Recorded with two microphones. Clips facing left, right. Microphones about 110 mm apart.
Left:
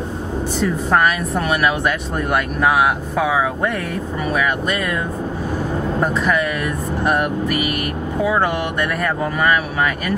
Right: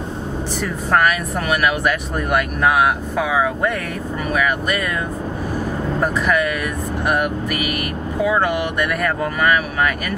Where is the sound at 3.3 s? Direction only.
Centre (ahead or behind).